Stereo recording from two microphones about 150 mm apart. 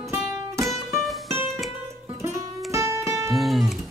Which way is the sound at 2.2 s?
20° right (ahead or behind).